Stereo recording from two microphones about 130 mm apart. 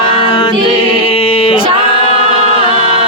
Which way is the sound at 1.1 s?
45° left (ahead or behind).